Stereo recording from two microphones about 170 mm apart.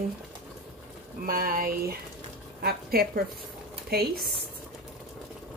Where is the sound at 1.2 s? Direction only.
60° right (ahead or behind).